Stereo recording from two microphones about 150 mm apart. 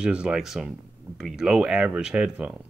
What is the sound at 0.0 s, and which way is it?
Speech, 5° right (ahead or behind).